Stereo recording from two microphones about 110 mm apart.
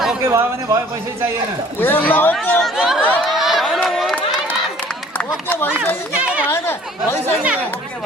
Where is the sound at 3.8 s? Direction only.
5° left (ahead or behind).